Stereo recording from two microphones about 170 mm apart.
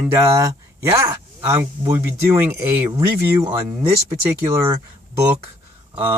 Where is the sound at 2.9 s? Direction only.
25° right (ahead or behind).